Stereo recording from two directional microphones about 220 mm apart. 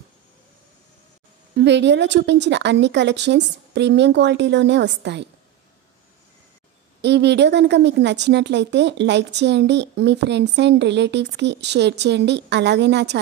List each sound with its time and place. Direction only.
1.6 s a woman's voice: 50° right (ahead or behind)
7.0 s a woman's voice: 50° right (ahead or behind)